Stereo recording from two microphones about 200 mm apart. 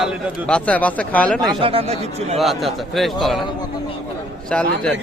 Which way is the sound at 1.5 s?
30° right (ahead or behind).